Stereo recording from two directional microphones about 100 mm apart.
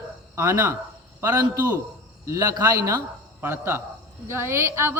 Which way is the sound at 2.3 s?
40° right (ahead or behind).